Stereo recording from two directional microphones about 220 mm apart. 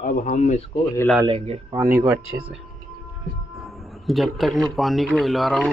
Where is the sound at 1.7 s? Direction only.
15° right (ahead or behind).